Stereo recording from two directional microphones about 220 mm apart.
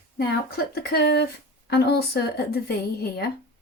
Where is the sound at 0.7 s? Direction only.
45° left (ahead or behind).